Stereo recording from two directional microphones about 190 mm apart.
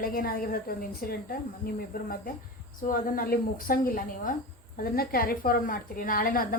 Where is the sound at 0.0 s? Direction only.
50° left (ahead or behind).